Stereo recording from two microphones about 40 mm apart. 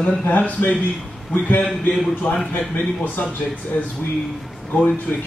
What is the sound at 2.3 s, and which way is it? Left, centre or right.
Speech, left.